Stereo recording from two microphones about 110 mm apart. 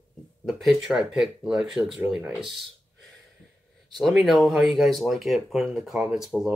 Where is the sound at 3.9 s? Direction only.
Centre (ahead or behind).